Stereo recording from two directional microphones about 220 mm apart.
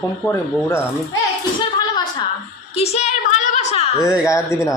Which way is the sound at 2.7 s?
30° left (ahead or behind).